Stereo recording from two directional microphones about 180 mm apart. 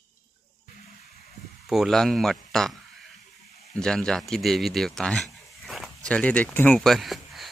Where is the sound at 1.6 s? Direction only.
Centre (ahead or behind).